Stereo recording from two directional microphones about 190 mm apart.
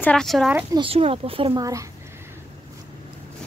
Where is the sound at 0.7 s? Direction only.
30° right (ahead or behind).